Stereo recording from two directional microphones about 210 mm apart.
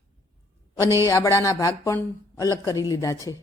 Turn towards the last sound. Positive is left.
turn(degrees=15)  # may be behind; listen again after turning